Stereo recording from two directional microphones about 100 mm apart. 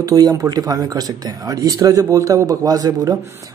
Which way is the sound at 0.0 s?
35° right (ahead or behind).